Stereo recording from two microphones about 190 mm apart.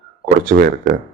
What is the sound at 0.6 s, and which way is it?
Speech, 55° right (ahead or behind).